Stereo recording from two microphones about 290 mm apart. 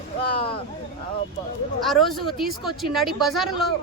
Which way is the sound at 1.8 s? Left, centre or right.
Centre.